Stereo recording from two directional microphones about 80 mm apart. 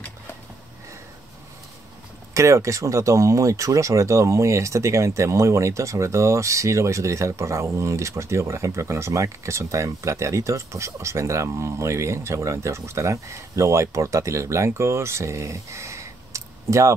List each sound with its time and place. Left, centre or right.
2.3 s speech: right